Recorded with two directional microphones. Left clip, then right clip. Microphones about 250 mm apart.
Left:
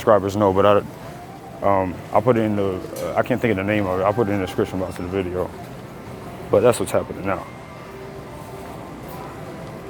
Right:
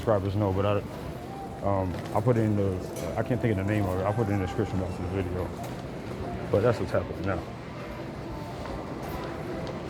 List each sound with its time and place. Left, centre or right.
0.0 s speech: left
6.5 s speech: left